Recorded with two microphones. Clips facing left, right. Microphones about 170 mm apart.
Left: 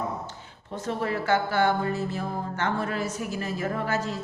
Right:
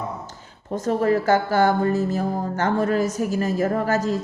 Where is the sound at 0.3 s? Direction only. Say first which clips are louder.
Right 7 dB; 45° right (ahead or behind).